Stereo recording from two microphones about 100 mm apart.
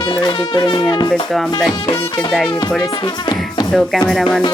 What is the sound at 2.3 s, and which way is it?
Music, centre (ahead or behind).